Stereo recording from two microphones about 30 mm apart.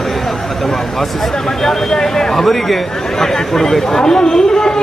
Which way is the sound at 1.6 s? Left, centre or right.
Centre.